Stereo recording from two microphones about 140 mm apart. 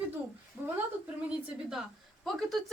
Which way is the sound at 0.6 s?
15° right (ahead or behind).